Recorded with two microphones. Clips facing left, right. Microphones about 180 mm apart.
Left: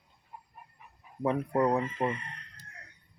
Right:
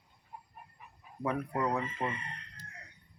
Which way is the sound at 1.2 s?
30° left (ahead or behind).